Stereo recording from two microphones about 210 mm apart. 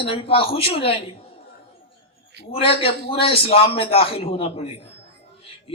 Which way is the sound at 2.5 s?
25° left (ahead or behind).